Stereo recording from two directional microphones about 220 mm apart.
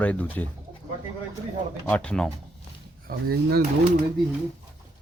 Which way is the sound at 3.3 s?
40° right (ahead or behind).